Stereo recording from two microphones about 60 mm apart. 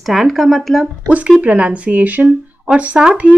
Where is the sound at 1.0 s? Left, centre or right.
Right.